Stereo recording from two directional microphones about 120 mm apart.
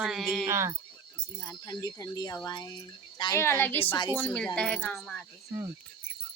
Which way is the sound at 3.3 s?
20° left (ahead or behind).